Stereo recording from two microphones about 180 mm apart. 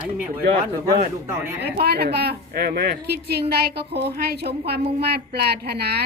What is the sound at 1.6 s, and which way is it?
A woman's voice, 60° right (ahead or behind).